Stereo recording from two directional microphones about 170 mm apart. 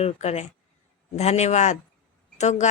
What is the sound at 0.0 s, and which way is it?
A woman's voice, 40° left (ahead or behind).